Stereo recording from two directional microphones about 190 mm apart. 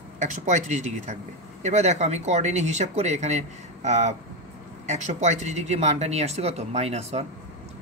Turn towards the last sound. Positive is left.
turn(degrees=-35)  # may be behind; listen again after turning